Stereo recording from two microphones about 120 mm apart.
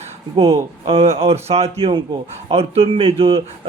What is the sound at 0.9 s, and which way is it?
Speech, 55° right (ahead or behind).